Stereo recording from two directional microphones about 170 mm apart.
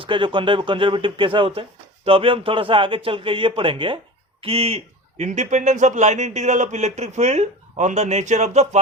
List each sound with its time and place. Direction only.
0.0 s a man's voice: 30° right (ahead or behind)